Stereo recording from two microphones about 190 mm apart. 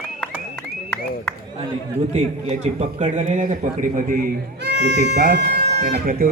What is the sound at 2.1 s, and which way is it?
A man's voice, 35° right (ahead or behind).